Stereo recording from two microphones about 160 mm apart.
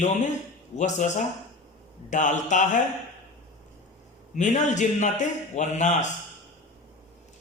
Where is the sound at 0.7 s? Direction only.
50° left (ahead or behind).